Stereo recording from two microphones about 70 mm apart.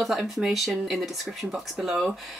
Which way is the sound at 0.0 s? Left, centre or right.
Centre.